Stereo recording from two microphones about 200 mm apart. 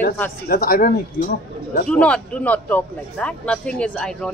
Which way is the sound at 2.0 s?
5° left (ahead or behind).